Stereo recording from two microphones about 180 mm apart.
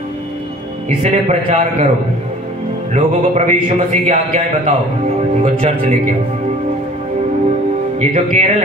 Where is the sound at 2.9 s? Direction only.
40° right (ahead or behind).